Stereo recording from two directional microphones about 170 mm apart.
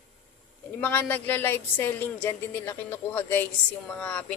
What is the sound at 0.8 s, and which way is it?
A man's voice, 10° left (ahead or behind).